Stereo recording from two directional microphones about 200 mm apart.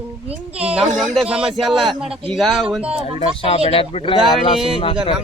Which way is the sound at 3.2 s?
30° left (ahead or behind).